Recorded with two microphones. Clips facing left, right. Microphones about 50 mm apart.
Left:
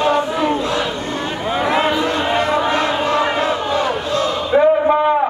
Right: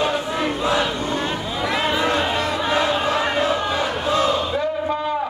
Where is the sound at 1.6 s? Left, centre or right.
Left.